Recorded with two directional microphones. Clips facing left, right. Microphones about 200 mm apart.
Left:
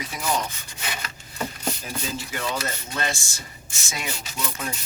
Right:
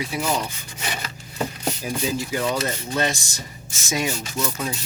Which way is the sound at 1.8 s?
15° right (ahead or behind).